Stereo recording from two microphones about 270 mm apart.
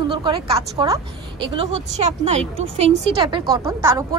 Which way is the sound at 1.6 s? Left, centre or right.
Right.